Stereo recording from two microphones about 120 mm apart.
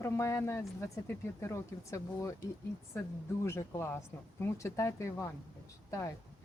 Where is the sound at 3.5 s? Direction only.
20° left (ahead or behind).